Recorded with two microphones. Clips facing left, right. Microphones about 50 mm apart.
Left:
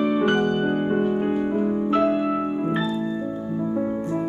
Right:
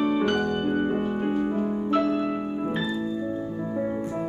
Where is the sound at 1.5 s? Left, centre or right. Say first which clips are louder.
Left 3 dB; centre.